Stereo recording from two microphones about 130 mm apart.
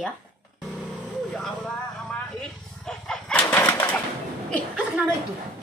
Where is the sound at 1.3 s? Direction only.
5° left (ahead or behind).